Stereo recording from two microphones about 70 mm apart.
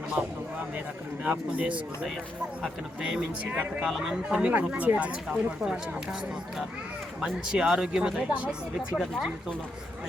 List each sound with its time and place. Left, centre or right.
1.2 s speech: centre
4.5 s speech: right
5.3 s speech: centre
7.5 s speech: centre